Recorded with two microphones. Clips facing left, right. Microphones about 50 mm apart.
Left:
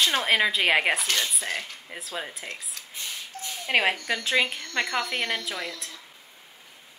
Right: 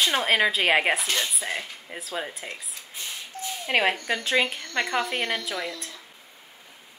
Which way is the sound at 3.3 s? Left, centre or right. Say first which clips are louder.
Right 7 dB; right.